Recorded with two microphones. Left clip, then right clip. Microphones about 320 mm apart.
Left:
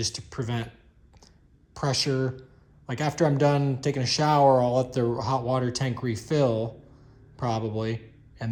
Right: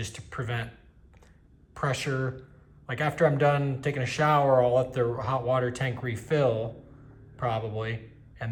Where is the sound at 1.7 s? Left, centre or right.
Left.